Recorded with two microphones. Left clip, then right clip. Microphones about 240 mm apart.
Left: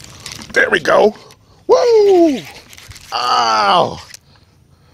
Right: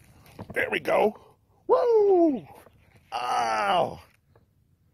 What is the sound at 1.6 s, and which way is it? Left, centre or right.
Speech, centre.